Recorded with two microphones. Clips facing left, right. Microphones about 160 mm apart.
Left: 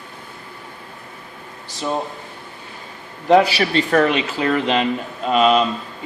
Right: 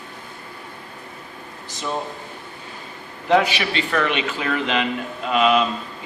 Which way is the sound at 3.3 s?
35° left (ahead or behind).